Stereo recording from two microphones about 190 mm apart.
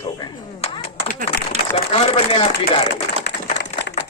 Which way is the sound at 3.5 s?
65° left (ahead or behind).